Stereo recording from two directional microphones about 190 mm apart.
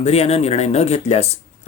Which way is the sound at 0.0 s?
35° left (ahead or behind).